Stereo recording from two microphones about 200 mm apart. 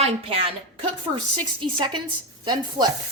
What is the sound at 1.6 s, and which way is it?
A woman's voice, 25° right (ahead or behind).